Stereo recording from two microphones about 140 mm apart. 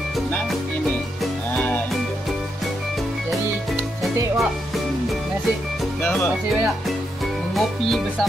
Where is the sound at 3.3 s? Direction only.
Centre (ahead or behind).